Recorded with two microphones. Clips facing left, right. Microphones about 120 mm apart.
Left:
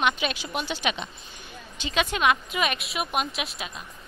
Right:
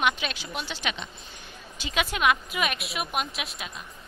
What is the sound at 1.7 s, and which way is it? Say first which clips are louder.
Speech: left 2 dB; 5° right (ahead or behind).